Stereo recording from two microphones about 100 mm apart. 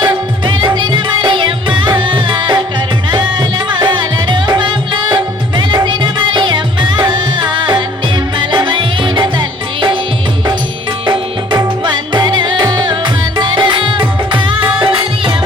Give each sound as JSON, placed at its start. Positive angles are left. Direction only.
{"t": 0.0, "sound": "music", "side_deg": -50}
{"t": 3.7, "sound": "music", "side_deg": -50}
{"t": 11.0, "sound": "music", "side_deg": -50}